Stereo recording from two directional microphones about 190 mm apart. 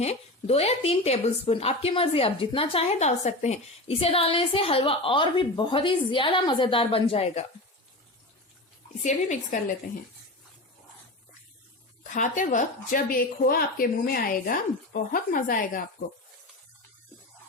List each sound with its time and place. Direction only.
0.0 s speech: 35° left (ahead or behind)
9.0 s speech: 40° left (ahead or behind)
12.1 s speech: 40° left (ahead or behind)